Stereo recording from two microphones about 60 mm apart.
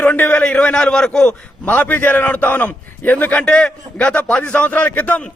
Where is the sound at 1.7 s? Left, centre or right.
Left.